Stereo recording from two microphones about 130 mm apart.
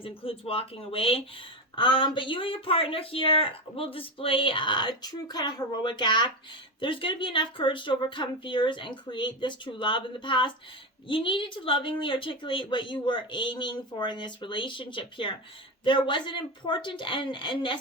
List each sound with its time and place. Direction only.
0.0 s a woman's voice: 45° left (ahead or behind)